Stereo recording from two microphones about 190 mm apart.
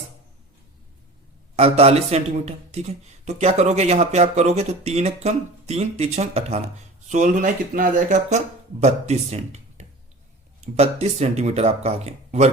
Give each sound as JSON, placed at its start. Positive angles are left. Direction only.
{"t": 1.5, "sound": "speech", "side_deg": -35}